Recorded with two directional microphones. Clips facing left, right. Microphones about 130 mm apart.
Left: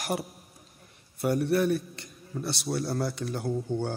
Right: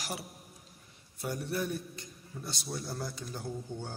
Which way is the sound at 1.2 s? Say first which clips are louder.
Left 10 dB; 65° left (ahead or behind).